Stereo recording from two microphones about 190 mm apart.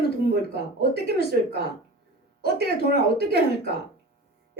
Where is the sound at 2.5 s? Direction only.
55° right (ahead or behind).